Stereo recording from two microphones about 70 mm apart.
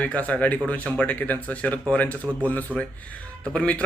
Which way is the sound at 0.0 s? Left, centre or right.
Left.